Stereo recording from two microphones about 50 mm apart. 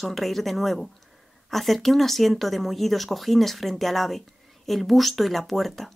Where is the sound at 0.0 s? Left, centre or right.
Centre.